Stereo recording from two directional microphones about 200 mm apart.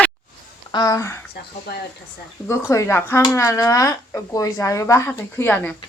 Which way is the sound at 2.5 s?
15° left (ahead or behind).